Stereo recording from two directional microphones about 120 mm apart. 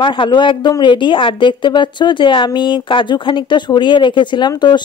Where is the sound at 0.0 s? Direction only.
45° left (ahead or behind).